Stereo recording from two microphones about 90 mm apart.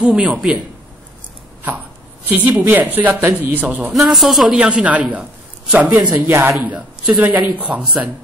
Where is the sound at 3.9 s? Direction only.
Centre (ahead or behind).